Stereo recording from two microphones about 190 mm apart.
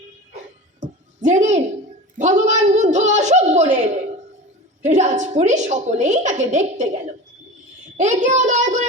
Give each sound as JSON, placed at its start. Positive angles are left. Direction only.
{"t": 0.8, "sound": "a sound", "side_deg": -40}
{"t": 4.8, "sound": "a woman's voice", "side_deg": -40}
{"t": 7.9, "sound": "child singing", "side_deg": -40}